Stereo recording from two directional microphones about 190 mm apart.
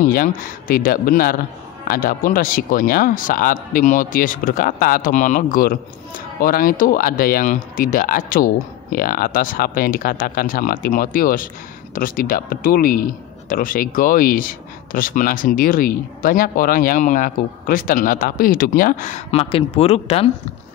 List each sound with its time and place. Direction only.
0.1 s speech: 50° left (ahead or behind); by 20.2 s 30° left (ahead or behind)